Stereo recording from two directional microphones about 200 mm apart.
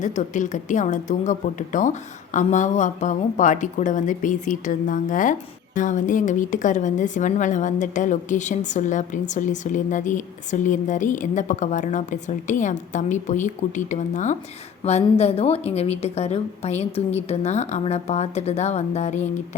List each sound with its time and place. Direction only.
0.0 s a woman's voice: 40° left (ahead or behind)